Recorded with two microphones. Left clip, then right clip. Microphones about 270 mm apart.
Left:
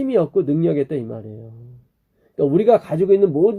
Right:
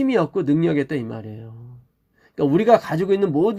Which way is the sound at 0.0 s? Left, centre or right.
Right.